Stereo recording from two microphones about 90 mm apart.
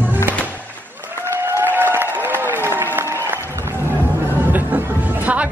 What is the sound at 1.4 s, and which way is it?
Music, 25° right (ahead or behind).